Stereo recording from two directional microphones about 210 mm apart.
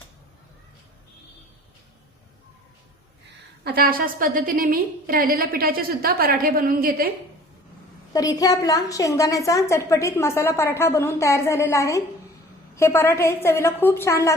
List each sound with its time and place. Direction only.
3.6 s a woman's voice: 50° right (ahead or behind)
8.1 s a woman's voice: 15° left (ahead or behind)